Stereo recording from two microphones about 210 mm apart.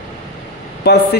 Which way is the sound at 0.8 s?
50° left (ahead or behind).